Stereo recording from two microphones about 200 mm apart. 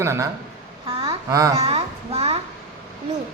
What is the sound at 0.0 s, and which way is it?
Speech, 15° right (ahead or behind).